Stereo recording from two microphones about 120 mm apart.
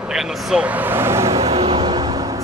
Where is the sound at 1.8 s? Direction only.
35° right (ahead or behind).